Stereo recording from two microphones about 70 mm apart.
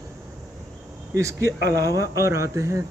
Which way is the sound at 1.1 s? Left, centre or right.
Right.